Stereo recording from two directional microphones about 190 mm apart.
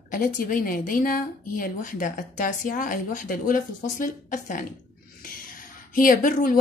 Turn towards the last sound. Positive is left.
turn(degrees=50)  # may be behind; listen again after turning